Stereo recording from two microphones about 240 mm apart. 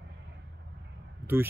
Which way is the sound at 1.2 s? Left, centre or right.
Centre.